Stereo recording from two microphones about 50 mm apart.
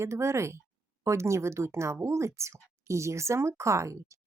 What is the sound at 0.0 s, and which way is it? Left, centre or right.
Speech, right.